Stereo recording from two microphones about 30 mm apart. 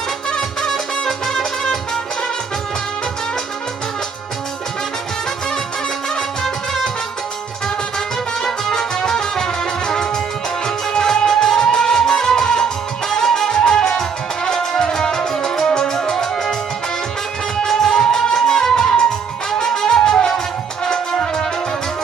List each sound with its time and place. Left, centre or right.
0.6 s music: centre
6.4 s music: centre
8.7 s music: left
11.2 s music: left
17.6 s music: centre